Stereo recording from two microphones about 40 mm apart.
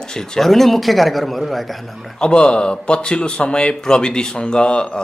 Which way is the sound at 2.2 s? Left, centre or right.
Left.